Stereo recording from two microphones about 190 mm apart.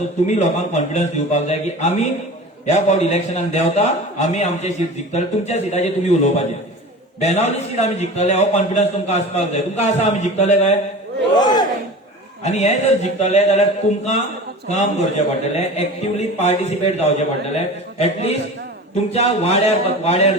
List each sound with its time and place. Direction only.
0.3 s a man's voice: 40° left (ahead or behind)
11.3 s speech: 20° left (ahead or behind)
12.4 s a man's voice: 35° left (ahead or behind)